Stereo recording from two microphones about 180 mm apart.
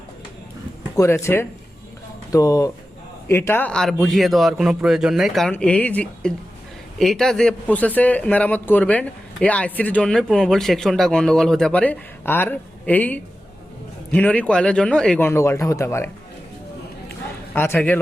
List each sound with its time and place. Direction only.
0.9 s a man's voice: 15° left (ahead or behind)
17.5 s a man's voice: 10° left (ahead or behind)